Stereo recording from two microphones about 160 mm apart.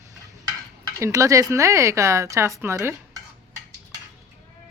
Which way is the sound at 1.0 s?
20° right (ahead or behind).